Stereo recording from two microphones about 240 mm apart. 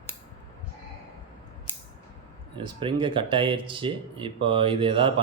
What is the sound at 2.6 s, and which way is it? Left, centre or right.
Speech, right.